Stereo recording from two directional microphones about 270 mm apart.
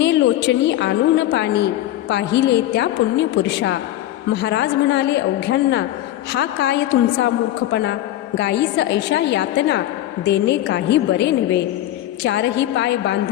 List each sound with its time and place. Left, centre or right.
0.0 s a woman's voice: left